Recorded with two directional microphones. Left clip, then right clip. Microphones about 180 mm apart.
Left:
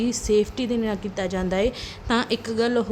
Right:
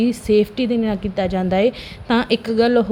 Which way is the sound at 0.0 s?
15° right (ahead or behind).